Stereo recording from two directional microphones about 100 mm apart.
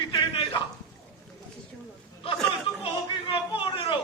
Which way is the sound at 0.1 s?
55° left (ahead or behind).